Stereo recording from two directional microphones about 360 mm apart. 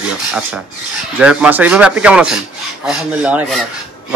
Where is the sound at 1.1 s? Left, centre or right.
Centre.